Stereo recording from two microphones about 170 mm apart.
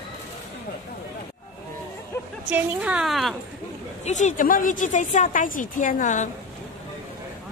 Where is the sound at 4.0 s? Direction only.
45° left (ahead or behind).